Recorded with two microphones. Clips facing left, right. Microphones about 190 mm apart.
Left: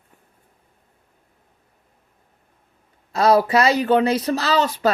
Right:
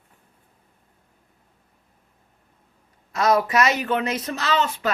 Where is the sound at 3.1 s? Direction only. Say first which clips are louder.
Left 4 dB; 30° left (ahead or behind).